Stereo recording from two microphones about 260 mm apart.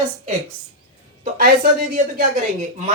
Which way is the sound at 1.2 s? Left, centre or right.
Right.